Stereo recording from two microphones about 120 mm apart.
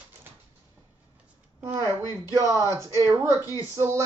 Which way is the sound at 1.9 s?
30° left (ahead or behind).